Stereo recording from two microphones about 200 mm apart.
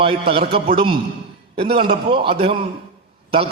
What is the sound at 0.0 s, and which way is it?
A man's voice, 25° right (ahead or behind).